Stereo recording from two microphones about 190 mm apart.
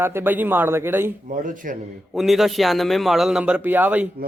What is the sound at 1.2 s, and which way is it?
Speech, 45° right (ahead or behind).